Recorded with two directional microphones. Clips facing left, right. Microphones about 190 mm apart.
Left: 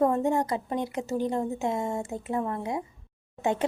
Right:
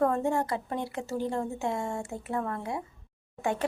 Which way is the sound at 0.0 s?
20° left (ahead or behind).